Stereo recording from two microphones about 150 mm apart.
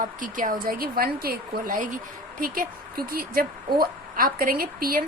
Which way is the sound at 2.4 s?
75° right (ahead or behind).